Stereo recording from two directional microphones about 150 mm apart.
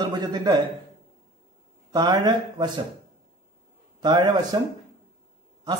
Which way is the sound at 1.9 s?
30° right (ahead or behind).